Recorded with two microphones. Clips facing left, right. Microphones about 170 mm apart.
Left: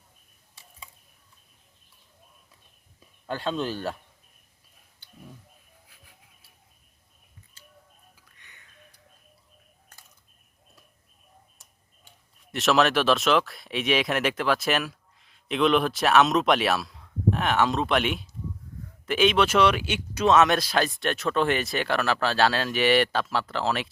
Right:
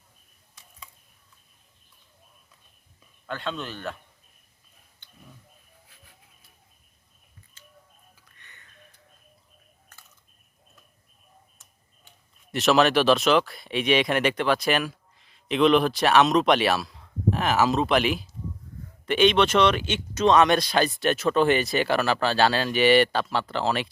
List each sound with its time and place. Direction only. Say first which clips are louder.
3.2 s speech: left 4 dB; 35° left (ahead or behind)
8.4 s a sound: right 2 dB; 15° left (ahead or behind)
12.5 s speech: right 2 dB; centre (ahead or behind)